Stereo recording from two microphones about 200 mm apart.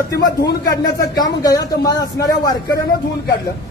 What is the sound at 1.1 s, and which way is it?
Speech, 20° left (ahead or behind).